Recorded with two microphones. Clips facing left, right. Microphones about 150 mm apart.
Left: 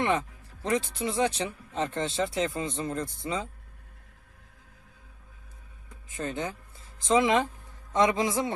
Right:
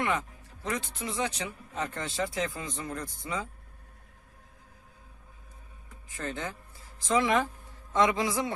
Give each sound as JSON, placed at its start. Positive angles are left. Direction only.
{"t": 0.0, "sound": "speech", "side_deg": 30}
{"t": 6.1, "sound": "speech", "side_deg": 20}